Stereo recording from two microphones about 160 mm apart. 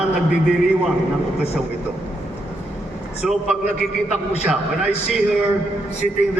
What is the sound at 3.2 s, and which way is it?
A man's voice, 5° right (ahead or behind).